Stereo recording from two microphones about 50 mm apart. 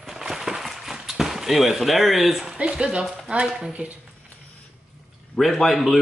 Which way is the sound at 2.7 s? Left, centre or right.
Centre.